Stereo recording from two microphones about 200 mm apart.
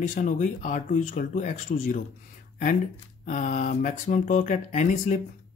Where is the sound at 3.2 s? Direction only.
40° left (ahead or behind).